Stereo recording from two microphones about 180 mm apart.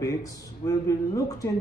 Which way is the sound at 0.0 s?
20° left (ahead or behind).